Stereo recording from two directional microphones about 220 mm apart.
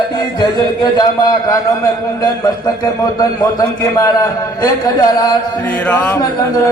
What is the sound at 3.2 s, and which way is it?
A man's voice, 15° left (ahead or behind).